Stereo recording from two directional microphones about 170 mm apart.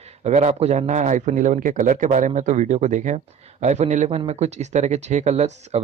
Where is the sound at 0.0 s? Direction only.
40° right (ahead or behind).